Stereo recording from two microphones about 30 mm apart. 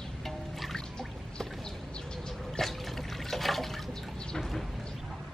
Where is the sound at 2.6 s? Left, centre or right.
Centre.